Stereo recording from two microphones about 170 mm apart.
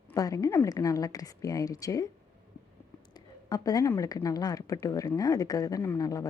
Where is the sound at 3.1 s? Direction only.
20° left (ahead or behind).